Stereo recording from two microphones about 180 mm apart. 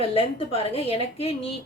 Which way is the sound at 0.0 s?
30° left (ahead or behind).